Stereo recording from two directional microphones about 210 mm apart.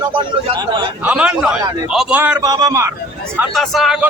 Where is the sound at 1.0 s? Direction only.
5° right (ahead or behind).